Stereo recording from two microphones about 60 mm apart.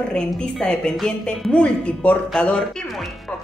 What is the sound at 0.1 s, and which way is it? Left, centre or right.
A woman's voice, centre.